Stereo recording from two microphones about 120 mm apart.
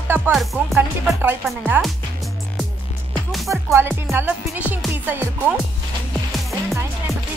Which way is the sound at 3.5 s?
20° right (ahead or behind).